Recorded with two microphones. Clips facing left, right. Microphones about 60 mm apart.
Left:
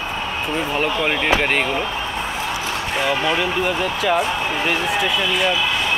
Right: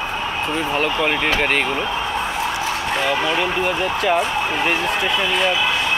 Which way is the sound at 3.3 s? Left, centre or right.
Centre.